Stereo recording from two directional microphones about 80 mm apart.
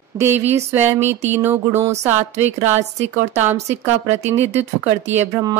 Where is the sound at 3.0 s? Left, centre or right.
Right.